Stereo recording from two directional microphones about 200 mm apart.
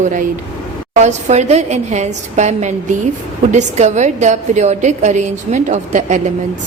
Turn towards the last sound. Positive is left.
turn(degrees=-35)  # may be behind; listen again after turning